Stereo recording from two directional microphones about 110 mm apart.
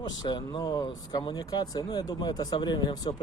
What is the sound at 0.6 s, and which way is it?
Speech, 30° left (ahead or behind).